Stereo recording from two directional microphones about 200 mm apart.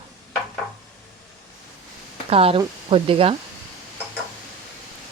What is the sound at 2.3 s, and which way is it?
Speech, 30° right (ahead or behind).